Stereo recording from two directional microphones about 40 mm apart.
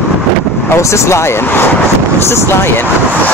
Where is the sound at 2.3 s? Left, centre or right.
Left.